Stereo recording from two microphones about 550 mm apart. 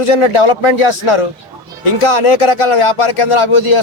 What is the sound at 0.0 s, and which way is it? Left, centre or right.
Speech, left.